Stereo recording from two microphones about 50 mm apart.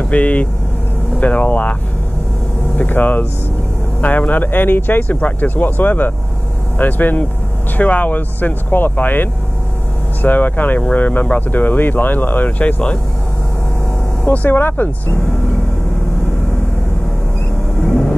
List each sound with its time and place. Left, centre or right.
0.0 s speech: left
2.9 s speech: left
14.2 s speech: left
17.8 s vehicle: centre